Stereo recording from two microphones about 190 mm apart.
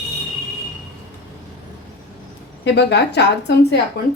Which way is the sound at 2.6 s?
65° left (ahead or behind).